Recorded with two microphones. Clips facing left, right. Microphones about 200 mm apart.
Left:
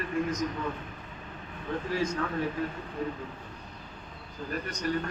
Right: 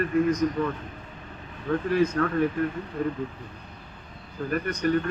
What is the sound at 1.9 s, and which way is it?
A man's voice, 55° right (ahead or behind).